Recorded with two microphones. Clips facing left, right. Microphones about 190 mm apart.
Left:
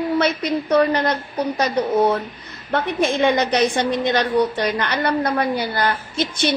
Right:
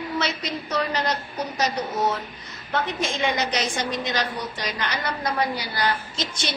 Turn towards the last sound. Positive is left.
turn(degrees=60)  # may be behind; listen again after turning